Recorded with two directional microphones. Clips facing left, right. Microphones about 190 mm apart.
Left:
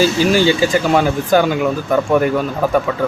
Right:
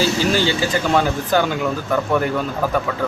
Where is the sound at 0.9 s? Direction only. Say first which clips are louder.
Left 3 dB; 10° left (ahead or behind).